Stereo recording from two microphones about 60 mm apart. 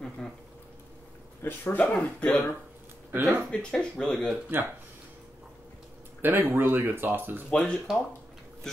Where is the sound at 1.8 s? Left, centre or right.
Left.